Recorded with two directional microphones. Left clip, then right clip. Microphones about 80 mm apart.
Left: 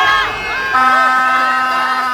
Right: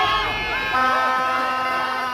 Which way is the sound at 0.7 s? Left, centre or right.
Right.